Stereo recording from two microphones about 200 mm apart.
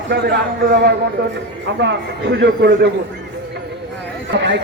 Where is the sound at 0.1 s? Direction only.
55° right (ahead or behind).